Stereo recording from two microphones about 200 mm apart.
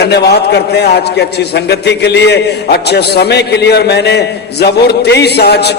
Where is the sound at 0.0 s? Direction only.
55° left (ahead or behind).